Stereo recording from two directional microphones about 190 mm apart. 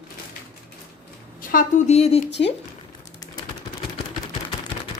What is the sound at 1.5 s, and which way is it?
Speech, 45° left (ahead or behind).